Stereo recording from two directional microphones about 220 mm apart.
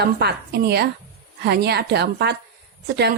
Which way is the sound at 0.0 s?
45° right (ahead or behind).